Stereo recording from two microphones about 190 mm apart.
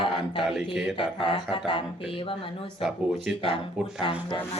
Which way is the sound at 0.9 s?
25° left (ahead or behind).